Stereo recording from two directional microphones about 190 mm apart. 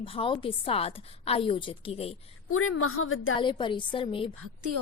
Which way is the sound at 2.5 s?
90° left.